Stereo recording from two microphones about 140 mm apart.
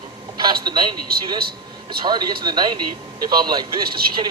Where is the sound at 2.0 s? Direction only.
30° right (ahead or behind).